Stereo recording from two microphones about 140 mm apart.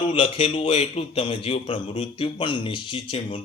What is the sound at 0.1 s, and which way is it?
A man's voice, 40° left (ahead or behind).